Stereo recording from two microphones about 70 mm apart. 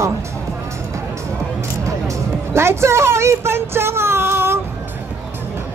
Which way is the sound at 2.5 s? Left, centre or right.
Right.